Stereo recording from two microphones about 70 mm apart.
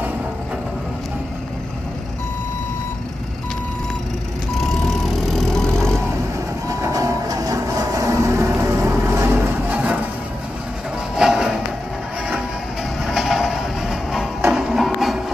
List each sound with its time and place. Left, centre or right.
4.6 s vehicle: centre
6.7 s vehicle: right
9.7 s music: centre
11.1 s music: centre
13.0 s music: centre